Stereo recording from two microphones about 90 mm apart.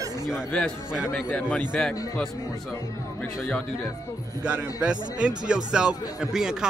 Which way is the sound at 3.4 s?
5° left (ahead or behind).